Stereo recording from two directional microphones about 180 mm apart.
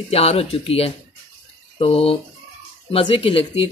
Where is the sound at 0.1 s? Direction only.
35° left (ahead or behind).